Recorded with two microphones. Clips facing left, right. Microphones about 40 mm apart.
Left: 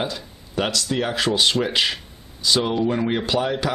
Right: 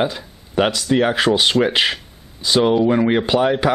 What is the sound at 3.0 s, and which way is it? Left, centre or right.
Speech, right.